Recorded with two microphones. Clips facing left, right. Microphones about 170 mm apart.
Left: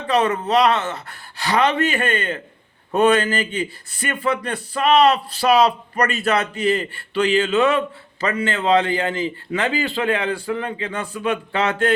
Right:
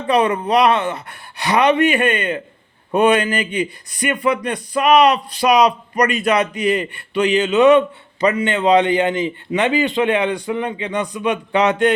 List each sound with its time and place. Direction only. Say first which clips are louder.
0.1 s speech: right 2 dB; 20° right (ahead or behind)